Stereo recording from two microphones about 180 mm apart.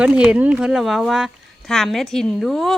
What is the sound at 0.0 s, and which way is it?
Speech, 5° right (ahead or behind).